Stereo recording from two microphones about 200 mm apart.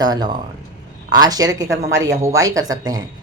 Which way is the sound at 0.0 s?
20° right (ahead or behind).